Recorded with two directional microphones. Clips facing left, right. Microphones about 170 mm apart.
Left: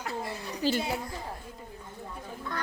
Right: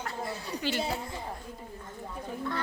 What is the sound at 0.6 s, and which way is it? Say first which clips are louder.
Speech: left 4 dB; 35° left (ahead or behind).